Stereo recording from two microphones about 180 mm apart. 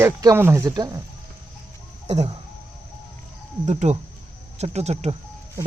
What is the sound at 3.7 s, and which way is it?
Speech, 40° right (ahead or behind).